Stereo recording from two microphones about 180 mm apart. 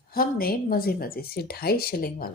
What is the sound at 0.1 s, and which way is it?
Speech, 55° left (ahead or behind).